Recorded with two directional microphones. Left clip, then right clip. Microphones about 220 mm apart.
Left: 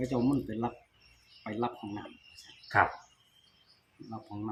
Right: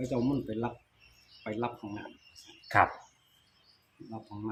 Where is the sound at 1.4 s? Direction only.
10° right (ahead or behind).